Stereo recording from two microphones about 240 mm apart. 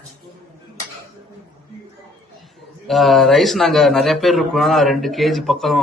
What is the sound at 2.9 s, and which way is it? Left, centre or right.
A man's voice, centre.